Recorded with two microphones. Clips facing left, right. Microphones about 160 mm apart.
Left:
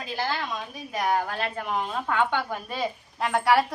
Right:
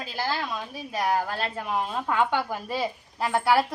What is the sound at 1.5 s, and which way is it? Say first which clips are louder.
A woman's voice: even; 5° right (ahead or behind).